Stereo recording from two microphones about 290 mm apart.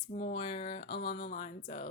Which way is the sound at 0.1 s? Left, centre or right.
Left.